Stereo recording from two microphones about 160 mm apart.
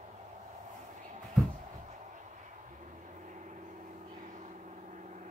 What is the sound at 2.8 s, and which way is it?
Vehicle, 50° right (ahead or behind).